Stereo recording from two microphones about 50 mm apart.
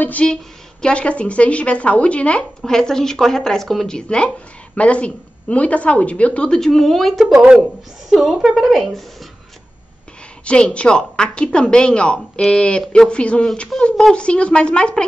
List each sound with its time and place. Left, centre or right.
0.2 s a woman's voice: centre
2.6 s a woman's voice: centre
6.5 s a woman's voice: centre
10.4 s a woman's voice: left